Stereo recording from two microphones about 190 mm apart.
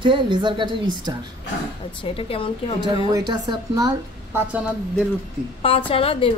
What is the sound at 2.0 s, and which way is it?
Speech, 30° left (ahead or behind).